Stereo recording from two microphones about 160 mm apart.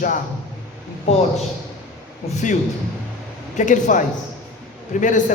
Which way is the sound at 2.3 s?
50° left (ahead or behind).